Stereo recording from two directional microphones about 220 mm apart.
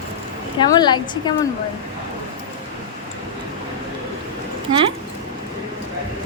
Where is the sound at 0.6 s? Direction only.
20° left (ahead or behind).